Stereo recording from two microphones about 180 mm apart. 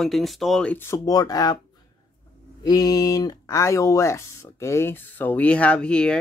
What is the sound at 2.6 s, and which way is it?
Speech, 20° left (ahead or behind).